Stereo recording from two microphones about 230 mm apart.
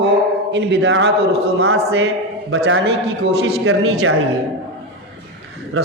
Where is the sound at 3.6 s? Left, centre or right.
Right.